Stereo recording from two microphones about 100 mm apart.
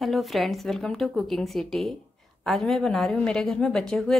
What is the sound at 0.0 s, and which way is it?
Speech, centre (ahead or behind).